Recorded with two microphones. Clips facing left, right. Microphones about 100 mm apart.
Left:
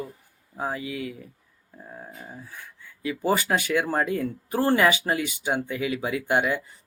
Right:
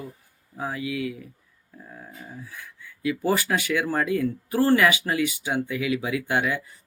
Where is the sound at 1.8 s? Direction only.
25° left (ahead or behind).